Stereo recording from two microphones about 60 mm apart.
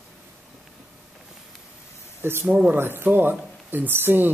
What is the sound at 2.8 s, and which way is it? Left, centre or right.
Speech, right.